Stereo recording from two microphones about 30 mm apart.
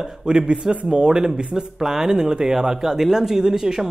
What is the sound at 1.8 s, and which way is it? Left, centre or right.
Speech, centre.